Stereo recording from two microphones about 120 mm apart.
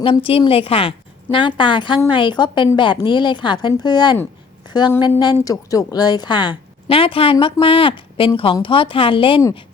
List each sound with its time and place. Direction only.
0.0 s a woman's voice: 50° left (ahead or behind)
4.7 s a sound: 35° left (ahead or behind)
5.2 s a woman's voice: 30° left (ahead or behind)